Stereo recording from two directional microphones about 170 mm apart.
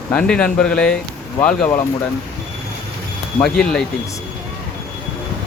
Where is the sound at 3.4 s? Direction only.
5° left (ahead or behind).